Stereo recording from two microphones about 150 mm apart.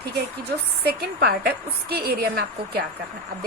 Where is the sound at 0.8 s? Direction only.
90° right.